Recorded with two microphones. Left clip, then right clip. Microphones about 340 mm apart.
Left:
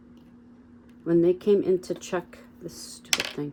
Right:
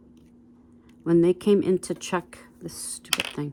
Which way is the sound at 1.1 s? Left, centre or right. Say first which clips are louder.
Right 1 dB; right.